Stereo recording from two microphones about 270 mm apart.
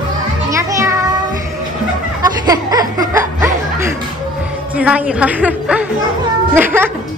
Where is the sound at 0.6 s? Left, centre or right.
Centre.